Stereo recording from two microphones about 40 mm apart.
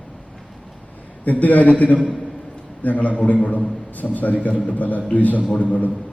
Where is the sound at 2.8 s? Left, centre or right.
Left.